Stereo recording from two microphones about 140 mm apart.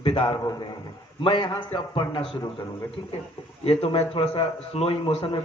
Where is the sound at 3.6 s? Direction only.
45° left (ahead or behind).